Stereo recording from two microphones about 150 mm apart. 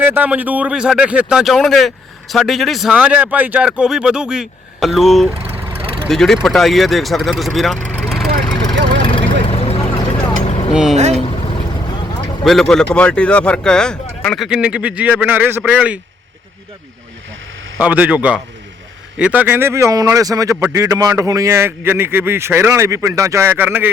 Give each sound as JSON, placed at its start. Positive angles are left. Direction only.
{"t": 0.0, "sound": "a man's voice", "side_deg": -10}
{"t": 5.4, "sound": "vehicle", "side_deg": -40}
{"t": 6.1, "sound": "a man's voice", "side_deg": 0}
{"t": 8.0, "sound": "vehicle", "side_deg": 0}
{"t": 9.0, "sound": "vehicle", "side_deg": 35}
{"t": 10.9, "sound": "boat", "side_deg": -50}
{"t": 12.5, "sound": "a man's voice", "side_deg": 0}
{"t": 17.7, "sound": "speech", "side_deg": -10}